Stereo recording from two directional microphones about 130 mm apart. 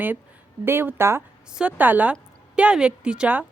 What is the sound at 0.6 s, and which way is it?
A woman's voice, 15° right (ahead or behind).